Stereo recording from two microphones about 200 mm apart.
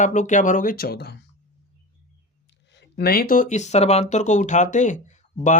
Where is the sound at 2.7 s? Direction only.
60° left (ahead or behind); by 5.2 s 40° left (ahead or behind).